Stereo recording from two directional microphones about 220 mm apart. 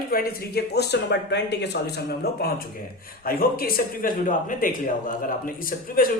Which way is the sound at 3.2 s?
40° left (ahead or behind).